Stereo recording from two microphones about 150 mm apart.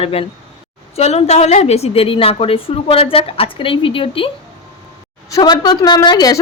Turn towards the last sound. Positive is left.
turn(degrees=25)  # may be behind; listen again after turning